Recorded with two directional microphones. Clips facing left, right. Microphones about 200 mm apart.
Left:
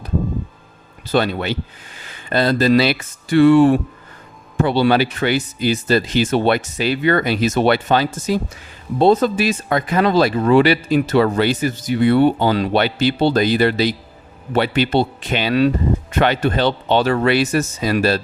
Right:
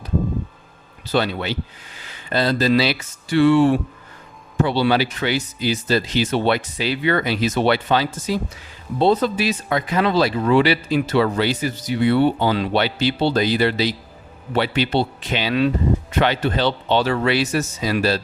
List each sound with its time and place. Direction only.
1.0 s speech: 50° left (ahead or behind)